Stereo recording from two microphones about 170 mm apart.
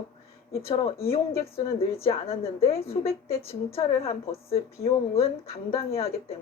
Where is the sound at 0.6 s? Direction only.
35° left (ahead or behind).